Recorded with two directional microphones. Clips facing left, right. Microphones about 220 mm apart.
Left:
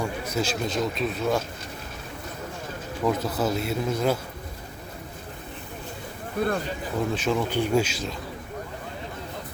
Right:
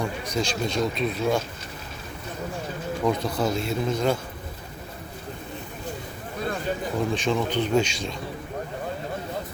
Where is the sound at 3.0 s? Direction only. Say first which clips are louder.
Even; 5° left (ahead or behind).